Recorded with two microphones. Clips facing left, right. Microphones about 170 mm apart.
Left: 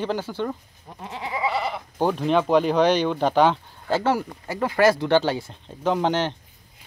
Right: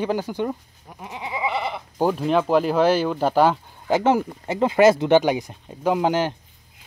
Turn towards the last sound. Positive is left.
turn(degrees=-10)  # may be behind; listen again after turning